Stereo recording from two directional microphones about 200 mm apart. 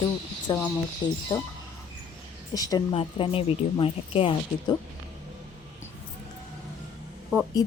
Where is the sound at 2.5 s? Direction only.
20° left (ahead or behind).